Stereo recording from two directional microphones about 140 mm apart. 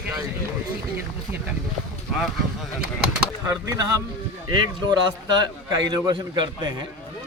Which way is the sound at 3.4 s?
20° right (ahead or behind).